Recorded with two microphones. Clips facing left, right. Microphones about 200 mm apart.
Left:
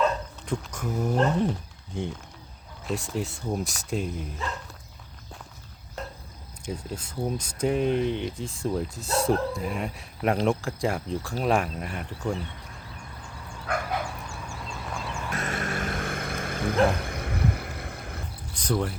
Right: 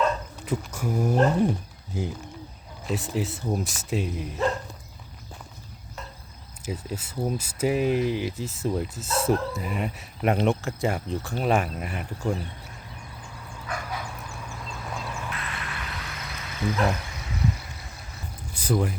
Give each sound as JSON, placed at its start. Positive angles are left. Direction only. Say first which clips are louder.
{"t": 0.4, "sound": "speech", "louder": "right 3 dB", "side_deg": -5}
{"t": 6.6, "sound": "speech", "louder": "right 1 dB", "side_deg": -5}
{"t": 13.7, "sound": "dog", "louder": "left 5 dB", "side_deg": 60}
{"t": 14.3, "sound": "duck", "louder": "even", "side_deg": 0}
{"t": 15.3, "sound": "a sound", "louder": "left 5 dB", "side_deg": 45}
{"t": 18.5, "sound": "a sound", "louder": "right 2 dB", "side_deg": -5}